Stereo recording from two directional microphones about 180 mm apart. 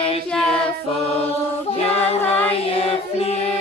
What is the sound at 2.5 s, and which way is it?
Music, 30° left (ahead or behind).